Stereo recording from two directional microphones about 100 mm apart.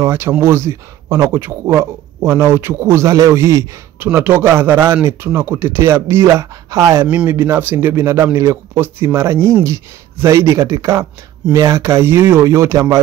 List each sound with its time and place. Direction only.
0.0 s speech: 25° right (ahead or behind)
7.1 s speech: 20° right (ahead or behind)